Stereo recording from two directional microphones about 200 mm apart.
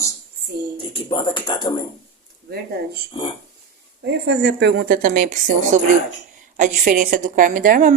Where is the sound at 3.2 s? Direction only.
25° left (ahead or behind).